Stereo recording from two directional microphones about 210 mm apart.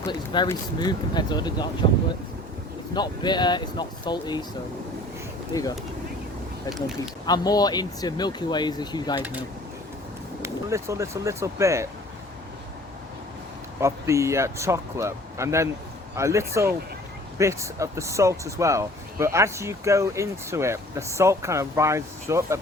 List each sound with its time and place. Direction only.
0.1 s speech: 20° left (ahead or behind)
2.9 s speech: 20° left (ahead or behind)
6.7 s speech: centre (ahead or behind)
7.3 s speech: 20° left (ahead or behind)
10.4 s speech: 15° right (ahead or behind)
13.8 s speech: 15° right (ahead or behind)